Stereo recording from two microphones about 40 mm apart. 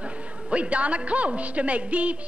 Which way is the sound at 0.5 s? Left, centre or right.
Right.